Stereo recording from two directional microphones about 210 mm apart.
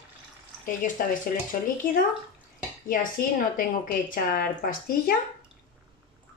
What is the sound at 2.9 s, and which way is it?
A woman's voice, 40° left (ahead or behind).